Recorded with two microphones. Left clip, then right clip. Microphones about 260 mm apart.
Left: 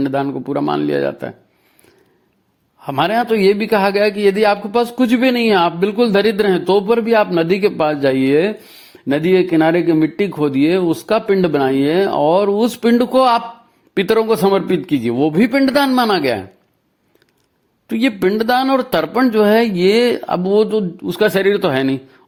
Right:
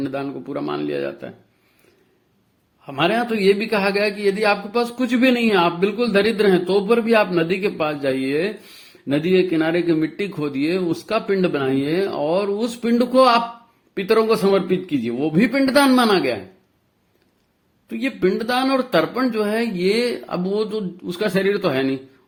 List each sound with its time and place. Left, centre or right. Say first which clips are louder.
0.0 s a man's voice: left 8 dB; left
2.8 s a man's voice: left 4 dB; left
17.8 s a man's voice: left 5 dB; left